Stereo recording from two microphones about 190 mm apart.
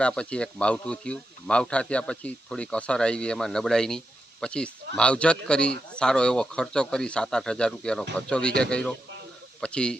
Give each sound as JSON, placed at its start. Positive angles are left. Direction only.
{"t": 0.0, "sound": "speech", "side_deg": 5}